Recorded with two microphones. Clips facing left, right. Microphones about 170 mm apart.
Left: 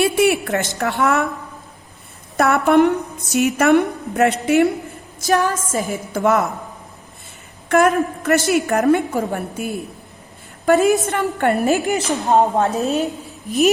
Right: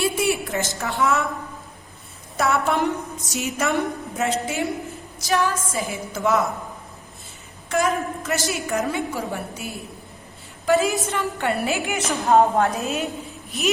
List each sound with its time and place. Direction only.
0.0 s a sound: 70° left (ahead or behind)
0.8 s a woman's voice: 65° left (ahead or behind)
2.4 s a woman's voice: 60° left (ahead or behind)
5.2 s a woman's voice: 45° left (ahead or behind); by 6.5 s 60° left (ahead or behind)
7.7 s a woman's voice: 60° left (ahead or behind); by 12.1 s 35° left (ahead or behind)
12.2 s a woman's voice: 20° left (ahead or behind)
12.8 s a woman's voice: 35° left (ahead or behind)